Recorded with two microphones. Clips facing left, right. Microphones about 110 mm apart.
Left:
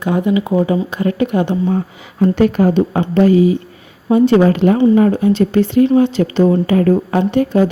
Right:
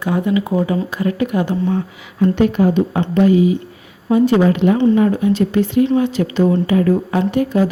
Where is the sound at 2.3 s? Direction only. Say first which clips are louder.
Left 2 dB; 45° left (ahead or behind); by 4.4 s 30° left (ahead or behind).